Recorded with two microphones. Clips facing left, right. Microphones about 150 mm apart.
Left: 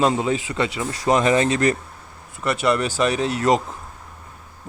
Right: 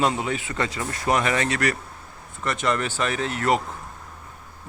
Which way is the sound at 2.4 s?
10° left (ahead or behind).